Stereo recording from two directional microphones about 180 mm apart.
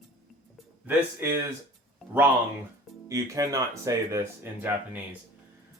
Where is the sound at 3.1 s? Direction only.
20° right (ahead or behind).